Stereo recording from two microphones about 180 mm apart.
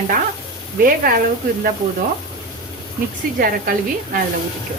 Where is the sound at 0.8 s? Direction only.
55° right (ahead or behind).